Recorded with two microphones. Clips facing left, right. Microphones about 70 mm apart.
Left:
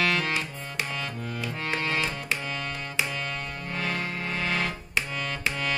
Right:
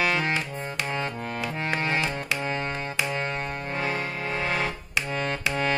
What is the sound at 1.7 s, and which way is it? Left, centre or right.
Music, right.